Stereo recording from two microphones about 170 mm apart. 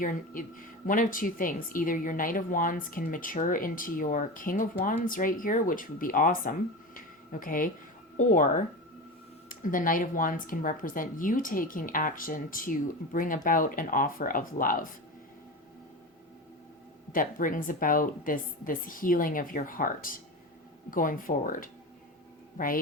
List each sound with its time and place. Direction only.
0.0 s speech: 50° left (ahead or behind)
17.1 s a woman's voice: 55° left (ahead or behind)